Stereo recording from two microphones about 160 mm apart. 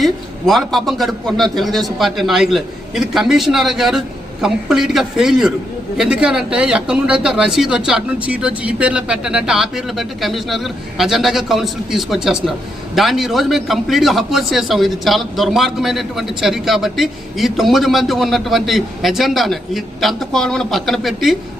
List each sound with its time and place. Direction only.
0.0 s a man's voice: centre (ahead or behind)